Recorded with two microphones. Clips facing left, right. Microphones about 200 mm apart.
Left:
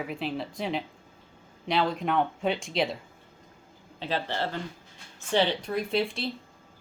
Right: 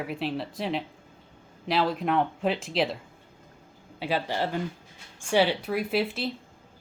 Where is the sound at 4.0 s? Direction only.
10° right (ahead or behind).